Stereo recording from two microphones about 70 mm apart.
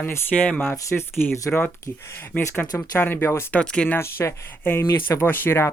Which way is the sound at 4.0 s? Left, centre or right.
Left.